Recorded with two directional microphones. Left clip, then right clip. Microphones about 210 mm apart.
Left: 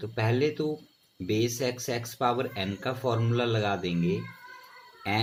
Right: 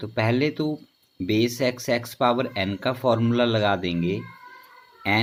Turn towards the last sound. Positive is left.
turn(degrees=-40)  # may be behind; listen again after turning